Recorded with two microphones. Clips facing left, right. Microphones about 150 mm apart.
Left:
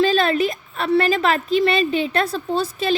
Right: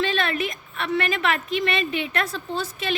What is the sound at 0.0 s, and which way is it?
A woman's voice, 35° left (ahead or behind).